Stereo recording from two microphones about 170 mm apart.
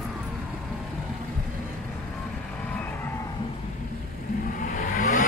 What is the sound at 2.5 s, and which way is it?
Vehicle, 10° left (ahead or behind).